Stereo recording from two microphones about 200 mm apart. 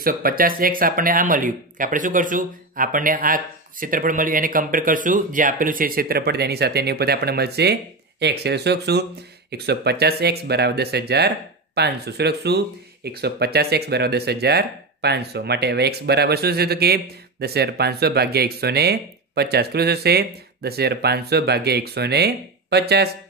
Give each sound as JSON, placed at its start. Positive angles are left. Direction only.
{"t": 0.0, "sound": "speech", "side_deg": -45}